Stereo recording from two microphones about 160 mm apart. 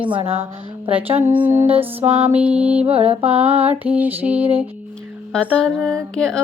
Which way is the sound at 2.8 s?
40° right (ahead or behind).